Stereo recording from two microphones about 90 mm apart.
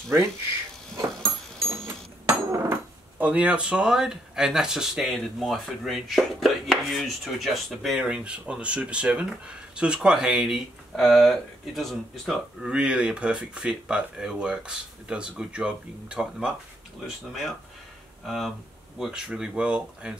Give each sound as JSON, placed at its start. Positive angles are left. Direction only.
{"t": 0.9, "sound": "tick-tock", "side_deg": -30}
{"t": 2.2, "sound": "a sound", "side_deg": -35}
{"t": 3.2, "sound": "speech", "side_deg": -15}
{"t": 8.0, "sound": "speech", "side_deg": -10}
{"t": 12.6, "sound": "speech", "side_deg": -10}